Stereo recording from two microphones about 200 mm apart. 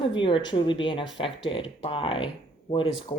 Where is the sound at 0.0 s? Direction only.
25° left (ahead or behind).